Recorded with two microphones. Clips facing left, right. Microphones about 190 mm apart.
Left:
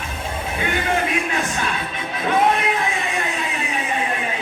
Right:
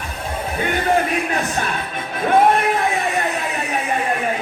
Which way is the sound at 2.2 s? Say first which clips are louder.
Right 4 dB; 55° right (ahead or behind).